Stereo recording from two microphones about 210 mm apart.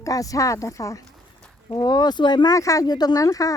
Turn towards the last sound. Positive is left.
turn(degrees=15)  # may be behind; listen again after turning